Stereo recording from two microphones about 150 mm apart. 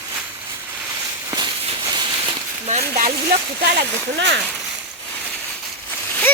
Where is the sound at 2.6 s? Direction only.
45° right (ahead or behind).